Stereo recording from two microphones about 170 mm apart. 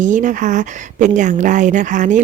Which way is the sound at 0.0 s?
50° right (ahead or behind).